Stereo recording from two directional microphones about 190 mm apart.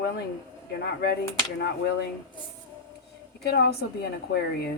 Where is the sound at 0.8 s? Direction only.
60° left (ahead or behind).